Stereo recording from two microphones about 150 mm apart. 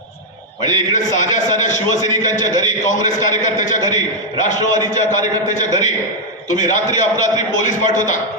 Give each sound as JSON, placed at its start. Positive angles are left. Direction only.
{"t": 0.6, "sound": "a man's voice", "side_deg": 55}